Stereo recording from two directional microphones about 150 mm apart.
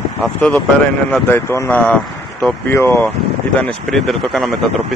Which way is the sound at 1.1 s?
15° left (ahead or behind).